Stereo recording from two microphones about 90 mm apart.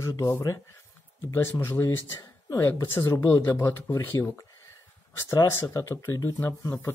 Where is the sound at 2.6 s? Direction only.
25° left (ahead or behind).